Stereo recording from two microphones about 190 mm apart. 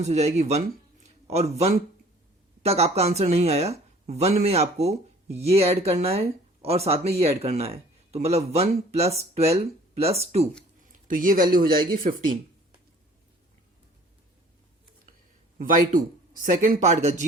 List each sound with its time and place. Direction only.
0.0 s speech: 35° right (ahead or behind)
11.1 s speech: 45° right (ahead or behind)
15.5 s speech: 45° right (ahead or behind)